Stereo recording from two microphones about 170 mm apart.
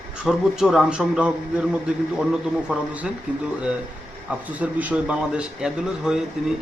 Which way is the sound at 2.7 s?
5° right (ahead or behind).